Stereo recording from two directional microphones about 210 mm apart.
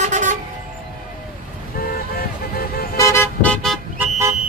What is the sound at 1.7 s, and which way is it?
Vehicle, 45° left (ahead or behind).